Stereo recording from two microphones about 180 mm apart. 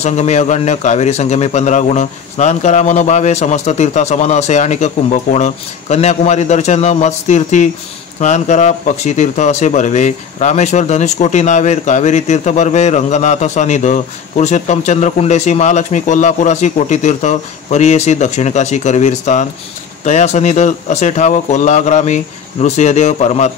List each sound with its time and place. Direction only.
0.0 s speech: 40° left (ahead or behind)